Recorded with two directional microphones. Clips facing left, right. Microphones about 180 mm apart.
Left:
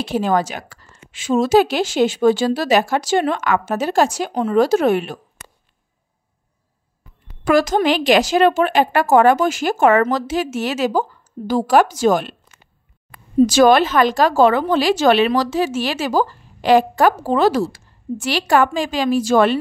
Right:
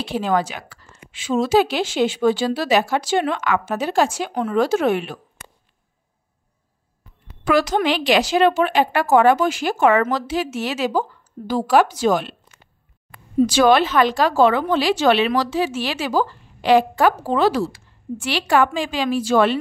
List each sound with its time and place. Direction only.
0.0 s a woman's voice: 45° left (ahead or behind)
4.3 s speech: 25° left (ahead or behind)
4.6 s speech: 40° left (ahead or behind)
7.4 s a woman's voice: 45° left (ahead or behind)
13.5 s a woman's voice: 45° left (ahead or behind)